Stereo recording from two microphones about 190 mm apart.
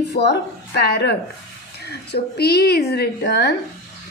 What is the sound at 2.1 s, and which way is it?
A woman's voice, 60° left (ahead or behind).